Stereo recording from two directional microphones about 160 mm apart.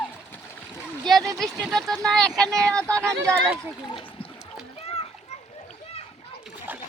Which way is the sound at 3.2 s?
15° right (ahead or behind).